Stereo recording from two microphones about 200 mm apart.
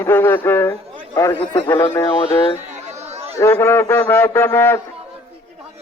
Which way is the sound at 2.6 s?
35° right (ahead or behind).